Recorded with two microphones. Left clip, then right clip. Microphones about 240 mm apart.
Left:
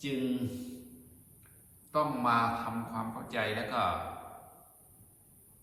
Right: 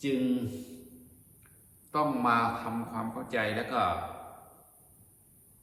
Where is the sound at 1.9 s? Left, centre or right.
Centre.